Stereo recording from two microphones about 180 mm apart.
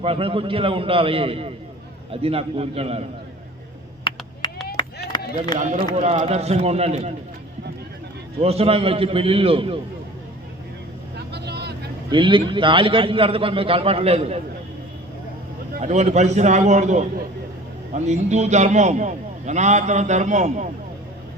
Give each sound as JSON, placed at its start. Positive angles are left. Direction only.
{"t": 0.0, "sound": "a man's voice", "side_deg": -30}
{"t": 4.1, "sound": "a sound", "side_deg": 25}
{"t": 5.7, "sound": "a man's voice", "side_deg": -35}
{"t": 8.4, "sound": "a man's voice", "side_deg": -35}
{"t": 11.3, "sound": "vehicle", "side_deg": -65}
{"t": 12.1, "sound": "a man's voice", "side_deg": -25}
{"t": 15.8, "sound": "a man's voice", "side_deg": -40}